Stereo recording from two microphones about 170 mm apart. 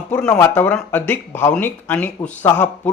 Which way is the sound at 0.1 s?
10° left (ahead or behind).